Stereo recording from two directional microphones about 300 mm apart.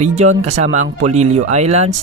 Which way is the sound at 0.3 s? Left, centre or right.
Right.